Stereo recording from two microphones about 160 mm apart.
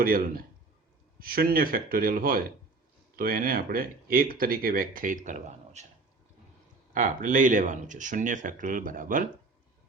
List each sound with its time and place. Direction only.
0.0 s speech: 65° right (ahead or behind); by 5.8 s 50° right (ahead or behind)
6.9 s speech: 55° right (ahead or behind)